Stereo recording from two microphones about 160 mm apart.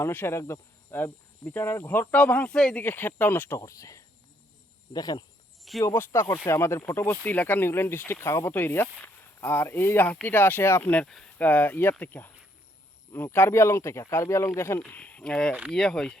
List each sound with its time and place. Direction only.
0.0 s speech: 15° left (ahead or behind)